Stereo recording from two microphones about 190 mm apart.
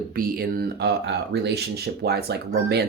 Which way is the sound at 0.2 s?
50° right (ahead or behind).